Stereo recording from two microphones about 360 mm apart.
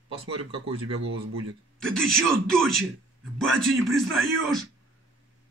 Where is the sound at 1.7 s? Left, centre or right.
Centre.